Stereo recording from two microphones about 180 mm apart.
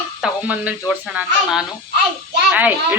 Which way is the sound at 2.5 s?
10° right (ahead or behind).